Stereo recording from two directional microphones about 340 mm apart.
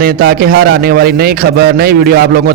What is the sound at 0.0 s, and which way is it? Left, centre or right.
A man's voice, right.